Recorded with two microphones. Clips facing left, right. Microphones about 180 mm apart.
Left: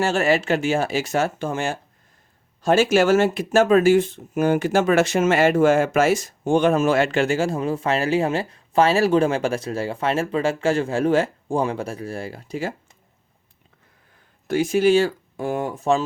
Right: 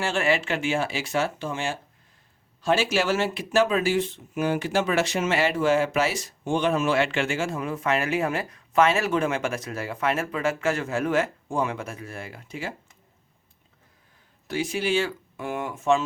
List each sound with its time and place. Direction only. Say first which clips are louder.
0.0 s speech: left 5 dB; 40° left (ahead or behind)
14.4 s speech: left 9 dB; 45° left (ahead or behind)